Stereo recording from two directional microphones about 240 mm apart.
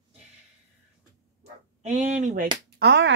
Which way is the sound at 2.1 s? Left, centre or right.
Right.